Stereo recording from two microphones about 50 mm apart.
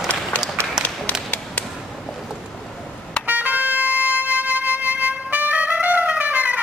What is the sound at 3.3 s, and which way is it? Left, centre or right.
Vehicle, right.